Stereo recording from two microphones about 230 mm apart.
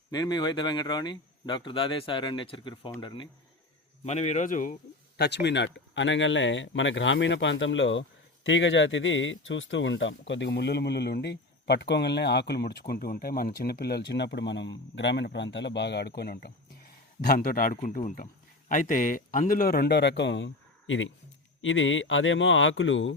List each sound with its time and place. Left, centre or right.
0.1 s speech: centre; by 23.1 s left